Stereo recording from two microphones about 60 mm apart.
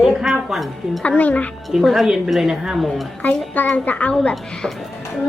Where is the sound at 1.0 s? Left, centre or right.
Left.